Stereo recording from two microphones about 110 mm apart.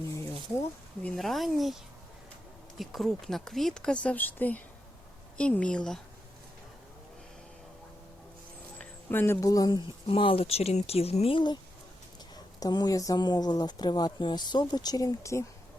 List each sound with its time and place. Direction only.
0.1 s a sound: 25° left (ahead or behind)
1.0 s a woman's voice: 5° left (ahead or behind)
8.8 s speech: 15° left (ahead or behind); by 9.8 s 35° left (ahead or behind)
10.1 s speech: 55° left (ahead or behind)
12.5 s speech: 35° left (ahead or behind)